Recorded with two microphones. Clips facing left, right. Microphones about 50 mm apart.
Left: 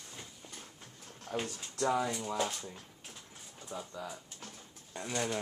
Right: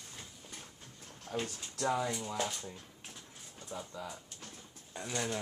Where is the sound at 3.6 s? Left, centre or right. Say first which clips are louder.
Left 1 dB; centre.